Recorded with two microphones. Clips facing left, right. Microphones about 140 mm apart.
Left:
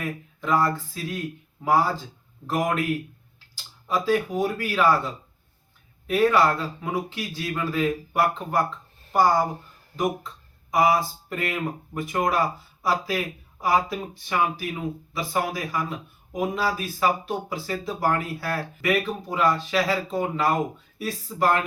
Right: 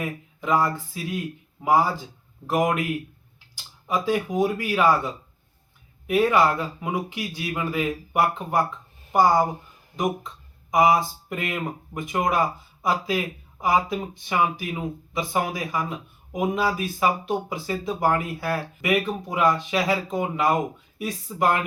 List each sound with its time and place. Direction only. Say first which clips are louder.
0.0 s speech: right 1 dB; 20° right (ahead or behind)